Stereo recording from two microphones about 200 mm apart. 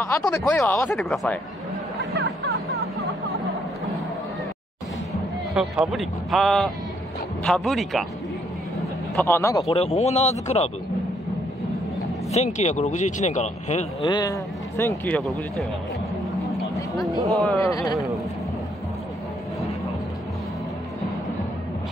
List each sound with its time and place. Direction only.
0.4 s speech: 10° left (ahead or behind)
5.5 s speech: 5° right (ahead or behind)
9.1 s speech: 10° left (ahead or behind)
9.7 s speech: 30° left (ahead or behind)
12.3 s speech: 35° left (ahead or behind)
14.0 s speech: 20° left (ahead or behind)
17.3 s speech: centre (ahead or behind)
17.6 s speech: 15° left (ahead or behind)